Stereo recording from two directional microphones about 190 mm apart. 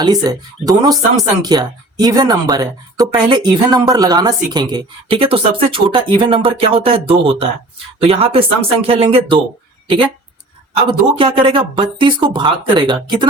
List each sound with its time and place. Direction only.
0.0 s speech: 20° right (ahead or behind)